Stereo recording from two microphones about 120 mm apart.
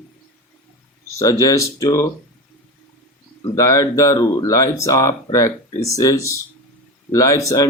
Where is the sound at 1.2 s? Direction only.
25° left (ahead or behind).